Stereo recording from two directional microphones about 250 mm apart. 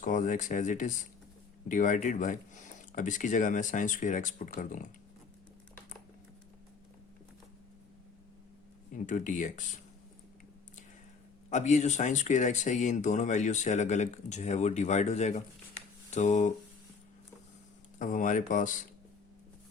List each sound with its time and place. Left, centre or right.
0.0 s speech: left
9.0 s speech: left
11.4 s speech: left
18.0 s speech: left